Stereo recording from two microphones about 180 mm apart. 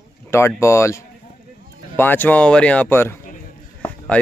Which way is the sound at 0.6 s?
15° left (ahead or behind).